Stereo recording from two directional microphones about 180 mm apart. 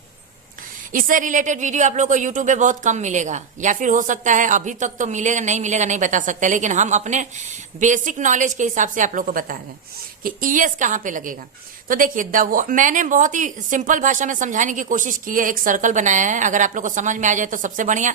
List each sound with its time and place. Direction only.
0.9 s speech: 50° right (ahead or behind)